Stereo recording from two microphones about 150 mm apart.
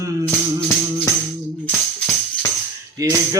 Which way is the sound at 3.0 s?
25° right (ahead or behind).